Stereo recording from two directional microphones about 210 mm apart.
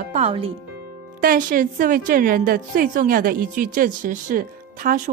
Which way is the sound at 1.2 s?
40° right (ahead or behind).